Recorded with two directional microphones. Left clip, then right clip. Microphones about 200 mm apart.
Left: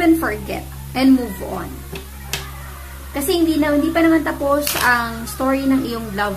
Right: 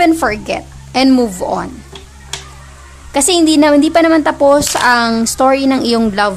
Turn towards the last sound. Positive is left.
turn(degrees=-45)  # may be behind; listen again after turning